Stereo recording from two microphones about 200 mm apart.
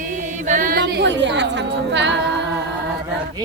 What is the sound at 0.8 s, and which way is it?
Speech, 60° right (ahead or behind).